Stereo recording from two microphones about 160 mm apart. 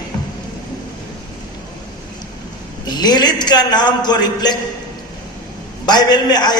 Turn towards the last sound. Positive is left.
turn(degrees=25)  # may be behind; listen again after turning